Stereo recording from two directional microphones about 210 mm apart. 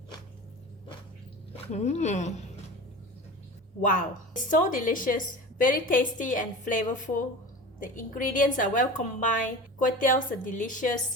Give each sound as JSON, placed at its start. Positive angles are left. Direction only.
{"t": 1.5, "sound": "speech", "side_deg": 30}
{"t": 3.8, "sound": "a woman's voice", "side_deg": 40}